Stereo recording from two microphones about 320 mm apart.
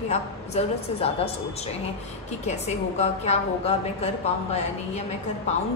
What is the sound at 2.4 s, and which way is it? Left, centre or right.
A woman's voice, centre.